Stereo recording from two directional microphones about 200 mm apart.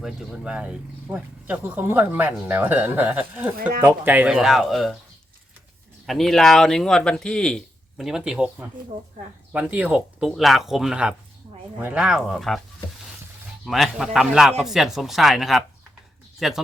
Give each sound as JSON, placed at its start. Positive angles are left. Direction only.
{"t": 0.0, "sound": "speech", "side_deg": -5}
{"t": 6.1, "sound": "speech", "side_deg": 0}
{"t": 13.7, "sound": "speech", "side_deg": 0}